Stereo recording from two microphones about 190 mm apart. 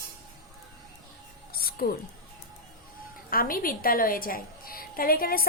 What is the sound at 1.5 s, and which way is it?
Music, 50° left (ahead or behind).